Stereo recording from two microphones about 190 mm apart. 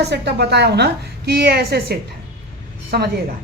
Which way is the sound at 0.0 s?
60° right (ahead or behind).